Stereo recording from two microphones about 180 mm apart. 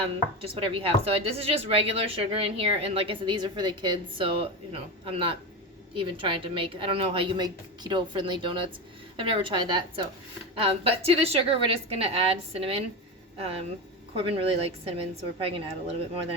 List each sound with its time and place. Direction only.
0.0 s a woman's voice: 30° right (ahead or behind)
14.2 s speech: 30° right (ahead or behind)